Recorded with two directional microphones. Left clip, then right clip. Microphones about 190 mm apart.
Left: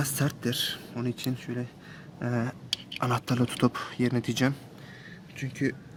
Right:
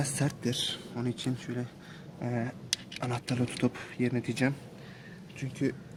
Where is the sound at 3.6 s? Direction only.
40° left (ahead or behind).